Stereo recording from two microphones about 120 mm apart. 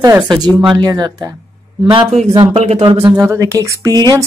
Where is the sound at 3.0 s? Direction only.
20° right (ahead or behind).